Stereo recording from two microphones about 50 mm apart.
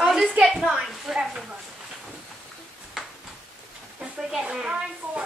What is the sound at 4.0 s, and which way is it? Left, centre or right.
Speech, centre.